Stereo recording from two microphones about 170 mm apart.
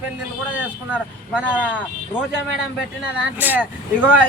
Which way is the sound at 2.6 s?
5° right (ahead or behind).